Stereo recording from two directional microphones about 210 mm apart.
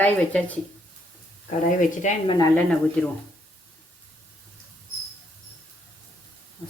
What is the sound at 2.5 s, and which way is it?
Speech, 5° left (ahead or behind).